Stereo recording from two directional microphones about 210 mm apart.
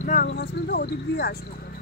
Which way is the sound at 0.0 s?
40° left (ahead or behind).